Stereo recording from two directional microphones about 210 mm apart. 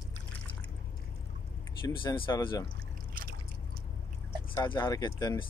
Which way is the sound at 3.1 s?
45° right (ahead or behind).